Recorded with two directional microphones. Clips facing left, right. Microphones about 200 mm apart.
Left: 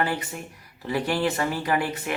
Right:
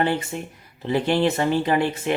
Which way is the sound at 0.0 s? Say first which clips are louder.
Right 4 dB; 25° right (ahead or behind).